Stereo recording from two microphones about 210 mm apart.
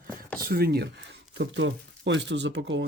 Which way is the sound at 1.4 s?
60° right (ahead or behind).